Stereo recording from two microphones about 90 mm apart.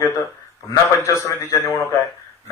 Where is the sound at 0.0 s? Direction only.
35° left (ahead or behind).